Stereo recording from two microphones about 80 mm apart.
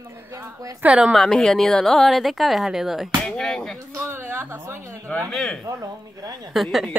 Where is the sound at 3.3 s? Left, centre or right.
Centre.